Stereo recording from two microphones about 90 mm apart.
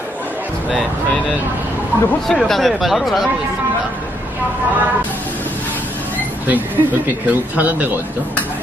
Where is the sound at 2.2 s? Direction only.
5° left (ahead or behind).